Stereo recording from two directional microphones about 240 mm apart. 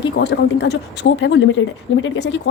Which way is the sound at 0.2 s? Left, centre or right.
Left.